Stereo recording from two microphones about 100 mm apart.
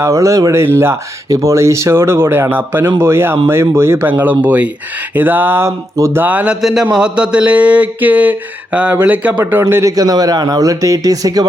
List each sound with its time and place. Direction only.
0.0 s speech: 30° right (ahead or behind)
6.2 s speech: 15° right (ahead or behind)
6.6 s a man's voice: centre (ahead or behind); by 9.9 s 25° right (ahead or behind)
9.9 s speech: 40° right (ahead or behind)